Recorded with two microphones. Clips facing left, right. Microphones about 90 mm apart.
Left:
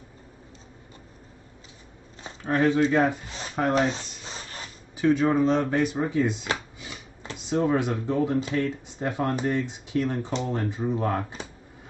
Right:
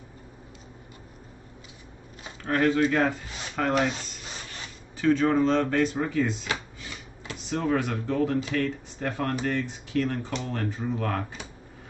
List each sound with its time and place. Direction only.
2.4 s speech: 20° left (ahead or behind)
4.9 s speech: 15° left (ahead or behind)